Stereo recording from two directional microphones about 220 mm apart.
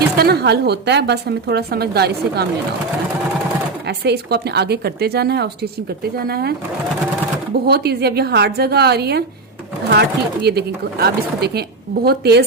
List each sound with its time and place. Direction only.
0.2 s a woman's voice: 45° right (ahead or behind)
3.8 s a woman's voice: 50° right (ahead or behind)
7.7 s a woman's voice: 45° right (ahead or behind)